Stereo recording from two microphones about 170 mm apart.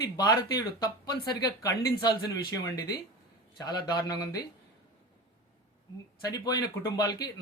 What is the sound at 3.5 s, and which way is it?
Speech, 20° left (ahead or behind).